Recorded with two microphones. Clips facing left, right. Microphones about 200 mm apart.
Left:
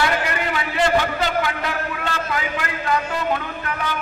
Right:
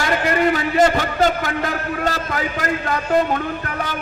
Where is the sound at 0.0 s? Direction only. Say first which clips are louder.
Right 4 dB; 45° right (ahead or behind).